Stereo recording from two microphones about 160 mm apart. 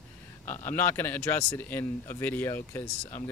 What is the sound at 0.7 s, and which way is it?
Speech, 15° left (ahead or behind).